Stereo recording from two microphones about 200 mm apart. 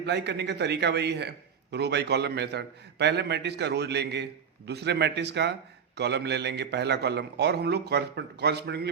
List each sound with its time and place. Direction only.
0.0 s a man's voice: 60° right (ahead or behind)